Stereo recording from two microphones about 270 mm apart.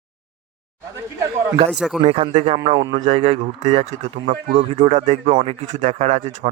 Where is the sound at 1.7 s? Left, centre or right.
Centre.